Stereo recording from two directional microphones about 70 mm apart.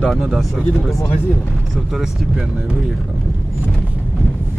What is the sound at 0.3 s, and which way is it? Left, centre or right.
Speech, centre.